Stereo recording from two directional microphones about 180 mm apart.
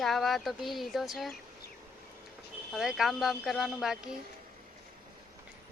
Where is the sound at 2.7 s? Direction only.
Centre (ahead or behind).